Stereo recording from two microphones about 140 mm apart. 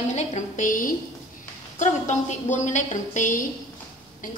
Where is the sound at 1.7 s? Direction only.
60° left (ahead or behind).